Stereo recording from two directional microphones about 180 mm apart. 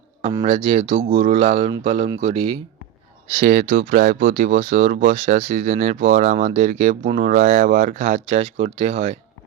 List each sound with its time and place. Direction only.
0.4 s speech: 35° right (ahead or behind)
3.3 s speech: 40° right (ahead or behind)
3.7 s speech: 55° right (ahead or behind)